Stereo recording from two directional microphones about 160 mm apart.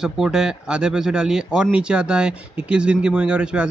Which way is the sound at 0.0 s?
5° right (ahead or behind).